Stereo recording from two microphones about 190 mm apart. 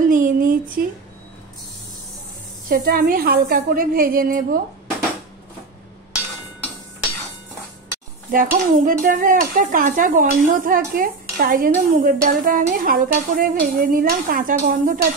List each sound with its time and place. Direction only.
0.0 s a sound: 45° right (ahead or behind)
2.7 s dishes: 50° right (ahead or behind)
8.3 s dishes: 45° right (ahead or behind)